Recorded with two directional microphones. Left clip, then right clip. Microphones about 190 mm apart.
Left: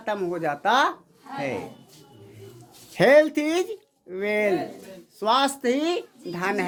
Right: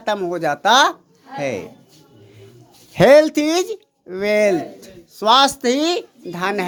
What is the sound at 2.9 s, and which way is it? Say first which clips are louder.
A woman's voice: right 6 dB; 20° right (ahead or behind).